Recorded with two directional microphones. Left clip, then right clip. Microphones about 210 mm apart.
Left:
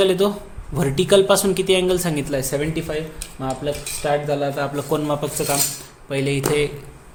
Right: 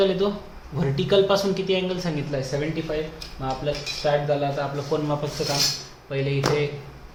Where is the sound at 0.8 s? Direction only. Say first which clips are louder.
Left 5 dB; 40° left (ahead or behind).